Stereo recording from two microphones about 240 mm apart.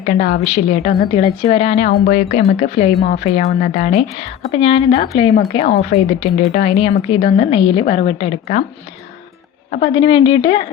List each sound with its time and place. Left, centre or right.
0.0 s a woman's voice: left
9.7 s a woman's voice: left